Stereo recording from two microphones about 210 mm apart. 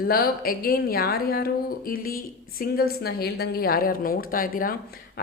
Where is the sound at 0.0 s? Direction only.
45° left (ahead or behind).